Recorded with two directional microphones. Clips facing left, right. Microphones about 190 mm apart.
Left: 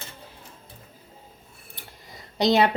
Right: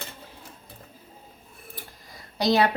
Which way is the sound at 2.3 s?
20° left (ahead or behind).